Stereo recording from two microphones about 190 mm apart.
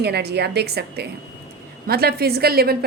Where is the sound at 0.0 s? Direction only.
60° right (ahead or behind).